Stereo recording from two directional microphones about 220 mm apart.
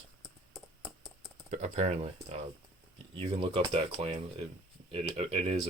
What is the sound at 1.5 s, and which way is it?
Speech, 30° right (ahead or behind).